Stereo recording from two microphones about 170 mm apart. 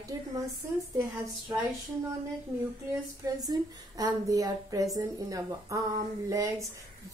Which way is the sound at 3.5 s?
20° right (ahead or behind).